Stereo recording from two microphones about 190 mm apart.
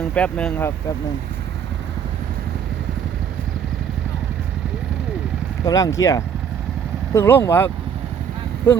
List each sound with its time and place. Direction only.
0.0 s speech: 5° left (ahead or behind)
5.6 s speech: 20° left (ahead or behind)